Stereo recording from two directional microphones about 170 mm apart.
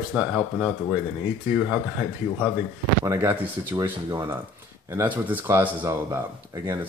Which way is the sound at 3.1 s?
15° right (ahead or behind).